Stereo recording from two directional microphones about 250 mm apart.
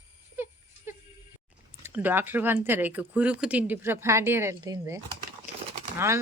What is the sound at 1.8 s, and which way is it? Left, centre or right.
Speech, centre.